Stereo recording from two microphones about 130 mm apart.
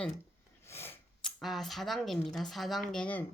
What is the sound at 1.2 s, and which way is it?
Speech, centre (ahead or behind).